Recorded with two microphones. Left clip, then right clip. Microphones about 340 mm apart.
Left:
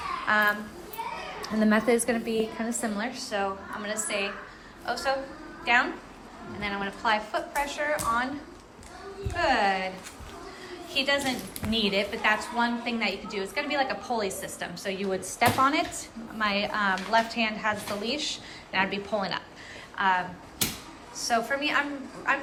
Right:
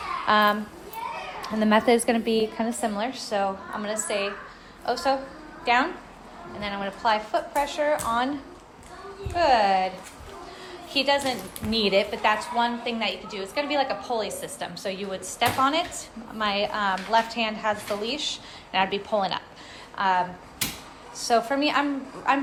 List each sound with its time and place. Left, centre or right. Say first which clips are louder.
0.3 s a sound: right 4 dB; centre
1.5 s a woman's voice: right 4 dB; centre
9.3 s a woman's voice: right 5 dB; centre
10.9 s a woman's voice: right 3 dB; centre
21.2 s a woman's voice: right 4 dB; centre